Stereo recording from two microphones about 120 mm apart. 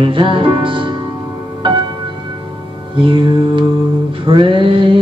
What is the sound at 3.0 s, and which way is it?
Mantra, 45° right (ahead or behind).